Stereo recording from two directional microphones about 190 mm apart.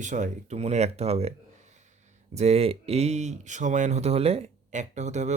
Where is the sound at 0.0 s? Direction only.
40° right (ahead or behind).